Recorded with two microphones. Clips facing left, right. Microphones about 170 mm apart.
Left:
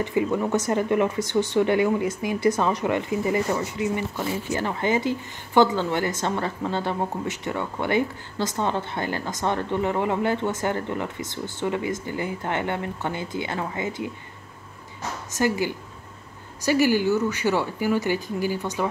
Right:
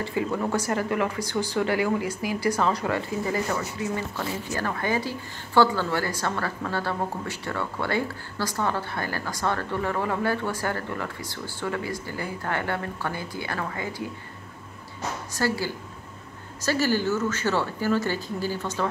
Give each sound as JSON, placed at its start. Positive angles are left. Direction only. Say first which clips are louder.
{"t": 0.0, "sound": "a woman's voice", "louder": "left 3 dB", "side_deg": 20}
{"t": 15.3, "sound": "speech", "louder": "left 4 dB", "side_deg": 15}